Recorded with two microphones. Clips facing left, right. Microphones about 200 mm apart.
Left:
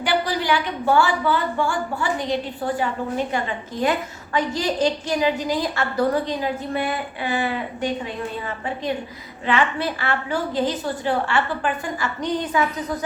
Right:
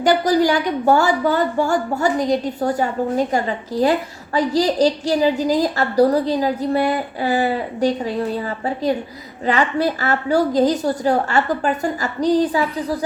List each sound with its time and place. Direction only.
0.0 s a woman's voice: 40° right (ahead or behind)